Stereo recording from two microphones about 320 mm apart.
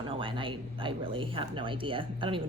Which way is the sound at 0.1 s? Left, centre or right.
Centre.